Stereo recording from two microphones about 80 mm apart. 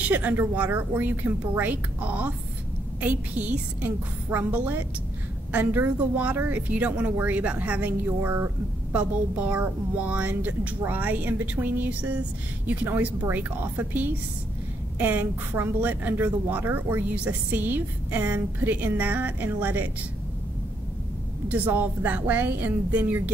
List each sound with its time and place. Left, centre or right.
0.0 s a woman's voice: right
8.9 s a woman's voice: centre
21.5 s a woman's voice: right